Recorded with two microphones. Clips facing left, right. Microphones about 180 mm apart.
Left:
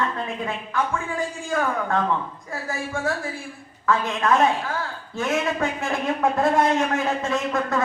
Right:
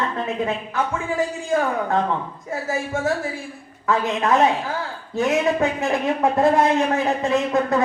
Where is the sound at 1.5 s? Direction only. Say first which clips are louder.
Right 3 dB; 20° right (ahead or behind).